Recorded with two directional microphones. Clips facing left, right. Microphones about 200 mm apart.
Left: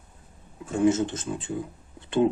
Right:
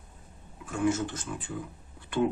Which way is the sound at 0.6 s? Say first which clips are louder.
Left 6 dB; 25° left (ahead or behind).